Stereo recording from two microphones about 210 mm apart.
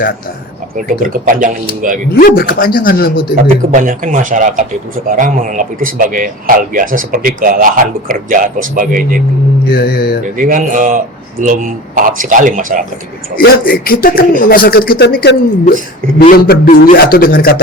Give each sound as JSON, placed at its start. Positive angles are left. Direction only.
{"t": 0.8, "sound": "a man's voice", "side_deg": -40}
{"t": 2.1, "sound": "speech", "side_deg": 45}
{"t": 3.7, "sound": "a man's voice", "side_deg": -35}
{"t": 9.6, "sound": "speech", "side_deg": 50}
{"t": 10.3, "sound": "a man's voice", "side_deg": -40}
{"t": 13.3, "sound": "speech", "side_deg": 45}